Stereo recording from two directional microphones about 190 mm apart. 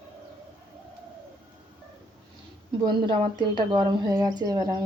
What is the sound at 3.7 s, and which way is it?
Speech, 20° right (ahead or behind).